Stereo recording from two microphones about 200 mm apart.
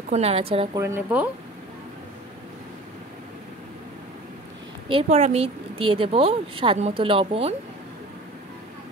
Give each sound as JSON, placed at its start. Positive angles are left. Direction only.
{"t": 0.1, "sound": "a woman's voice", "side_deg": -30}
{"t": 0.7, "sound": "speech", "side_deg": -10}
{"t": 4.8, "sound": "a woman's voice", "side_deg": -30}